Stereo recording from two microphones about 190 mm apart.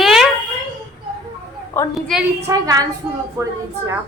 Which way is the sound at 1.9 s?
Centre (ahead or behind).